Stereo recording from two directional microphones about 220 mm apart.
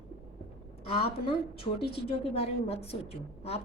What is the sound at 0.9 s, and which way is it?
A woman's voice, 25° left (ahead or behind).